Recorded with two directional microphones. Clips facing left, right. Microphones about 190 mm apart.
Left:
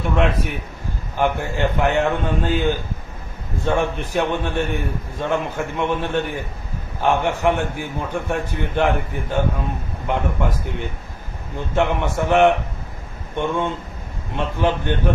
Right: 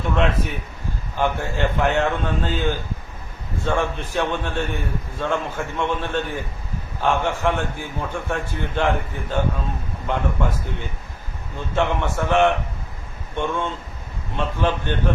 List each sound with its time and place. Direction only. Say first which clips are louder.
1.1 s a man's voice: left 2 dB; 15° left (ahead or behind)